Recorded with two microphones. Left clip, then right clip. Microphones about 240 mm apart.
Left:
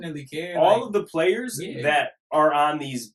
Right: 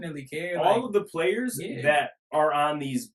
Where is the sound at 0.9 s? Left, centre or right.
Centre.